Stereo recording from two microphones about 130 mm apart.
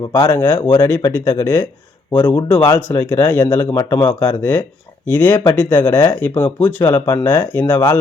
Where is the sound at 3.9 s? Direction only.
35° left (ahead or behind).